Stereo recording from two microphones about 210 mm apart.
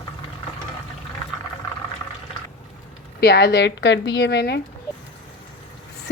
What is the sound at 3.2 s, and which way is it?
Speech, 50° left (ahead or behind).